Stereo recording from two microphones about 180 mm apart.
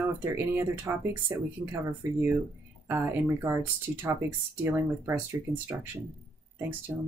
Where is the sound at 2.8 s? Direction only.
15° right (ahead or behind).